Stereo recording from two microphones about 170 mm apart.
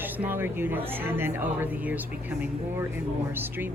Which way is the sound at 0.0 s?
10° right (ahead or behind).